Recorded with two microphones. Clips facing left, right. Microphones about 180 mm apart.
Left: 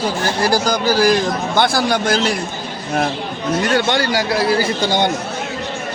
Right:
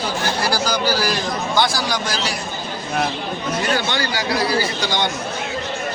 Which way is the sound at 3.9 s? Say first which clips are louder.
Left 4 dB; 50° left (ahead or behind).